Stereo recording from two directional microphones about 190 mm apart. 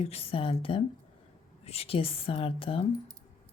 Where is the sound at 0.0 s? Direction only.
30° left (ahead or behind).